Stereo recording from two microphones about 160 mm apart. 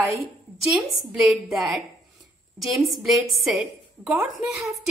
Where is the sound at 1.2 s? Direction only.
Centre (ahead or behind).